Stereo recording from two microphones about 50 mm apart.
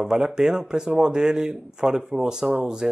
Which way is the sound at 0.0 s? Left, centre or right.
Centre.